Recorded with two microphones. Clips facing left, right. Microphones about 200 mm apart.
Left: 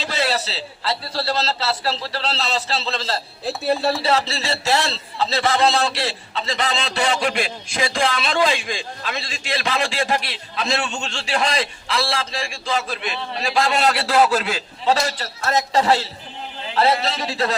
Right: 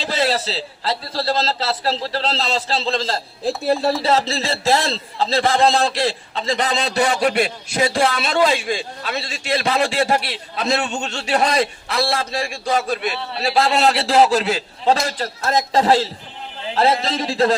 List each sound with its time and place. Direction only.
0.0 s a man's voice: 45° right (ahead or behind); by 14.2 s 30° right (ahead or behind)
14.8 s a man's voice: 45° right (ahead or behind)
16.7 s a man's voice: 45° right (ahead or behind)